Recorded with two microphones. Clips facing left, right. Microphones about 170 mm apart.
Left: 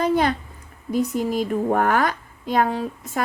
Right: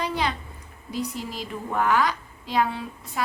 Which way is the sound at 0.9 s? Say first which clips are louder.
Left 9 dB; 50° left (ahead or behind).